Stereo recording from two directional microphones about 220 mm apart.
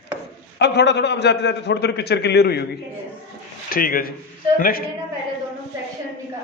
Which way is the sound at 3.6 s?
40° left (ahead or behind).